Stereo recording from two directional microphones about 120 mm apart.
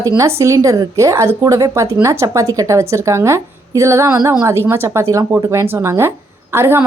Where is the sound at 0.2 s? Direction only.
25° right (ahead or behind).